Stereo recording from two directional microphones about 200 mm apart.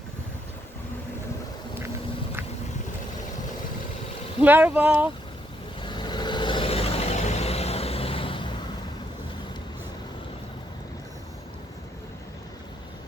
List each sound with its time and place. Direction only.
4.4 s speech: 10° right (ahead or behind)
5.8 s vehicle: 20° left (ahead or behind)